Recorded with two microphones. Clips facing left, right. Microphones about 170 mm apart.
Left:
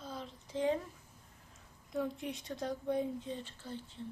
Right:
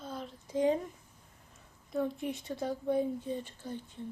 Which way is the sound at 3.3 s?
15° right (ahead or behind).